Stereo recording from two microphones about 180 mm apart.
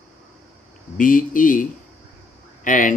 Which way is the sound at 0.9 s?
50° left (ahead or behind).